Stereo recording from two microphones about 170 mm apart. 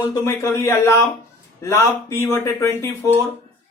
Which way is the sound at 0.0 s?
20° left (ahead or behind).